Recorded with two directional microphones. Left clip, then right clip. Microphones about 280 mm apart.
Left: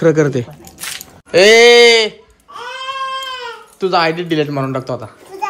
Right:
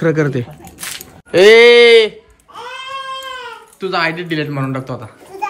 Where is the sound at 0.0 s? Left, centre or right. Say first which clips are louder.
Left 3 dB; centre.